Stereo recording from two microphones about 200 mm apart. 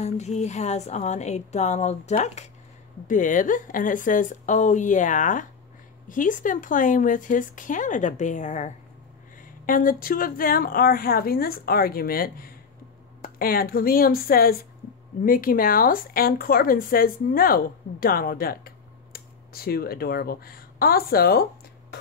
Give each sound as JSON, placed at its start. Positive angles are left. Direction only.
{"t": 0.0, "sound": "speech", "side_deg": 35}